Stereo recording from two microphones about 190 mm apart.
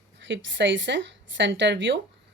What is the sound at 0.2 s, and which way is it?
Speech, 75° right (ahead or behind).